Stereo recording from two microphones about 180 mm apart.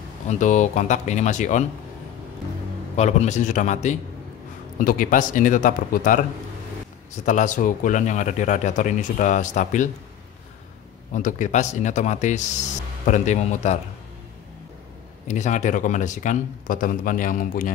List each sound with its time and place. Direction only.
0.3 s speech: 45° left (ahead or behind)
3.0 s speech: 40° left (ahead or behind)
7.2 s speech: 45° left (ahead or behind)
11.1 s speech: 45° left (ahead or behind)
15.2 s speech: 40° left (ahead or behind)